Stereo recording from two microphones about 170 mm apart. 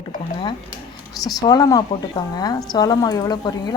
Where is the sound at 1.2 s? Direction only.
20° left (ahead or behind).